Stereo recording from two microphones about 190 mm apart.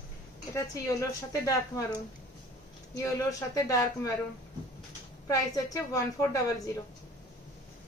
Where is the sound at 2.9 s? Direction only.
15° left (ahead or behind).